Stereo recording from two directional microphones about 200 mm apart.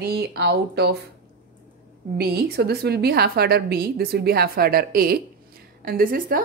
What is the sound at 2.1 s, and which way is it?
A woman's voice, 50° right (ahead or behind).